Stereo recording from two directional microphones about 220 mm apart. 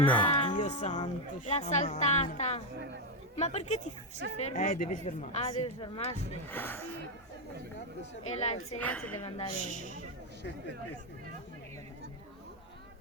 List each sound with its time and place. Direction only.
0.1 s speech: 5° left (ahead or behind)
0.3 s music: 30° left (ahead or behind)
1.5 s a woman's voice: 30° left (ahead or behind)
6.5 s speech: 10° left (ahead or behind)
8.3 s speech: 30° left (ahead or behind)
8.8 s a woman's voice: 5° left (ahead or behind)
9.2 s a woman's voice: 30° left (ahead or behind)